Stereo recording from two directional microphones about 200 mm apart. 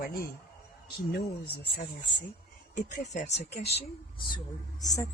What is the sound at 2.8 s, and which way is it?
Speech, 35° left (ahead or behind).